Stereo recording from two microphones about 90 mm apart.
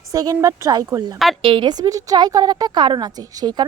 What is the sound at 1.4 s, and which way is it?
Speech, 70° right (ahead or behind).